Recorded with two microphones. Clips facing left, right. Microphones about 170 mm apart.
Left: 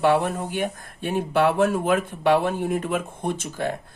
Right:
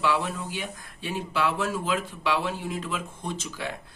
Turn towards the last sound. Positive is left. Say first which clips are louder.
# left 7 dB
turn(degrees=50)  # may be behind; listen again after turning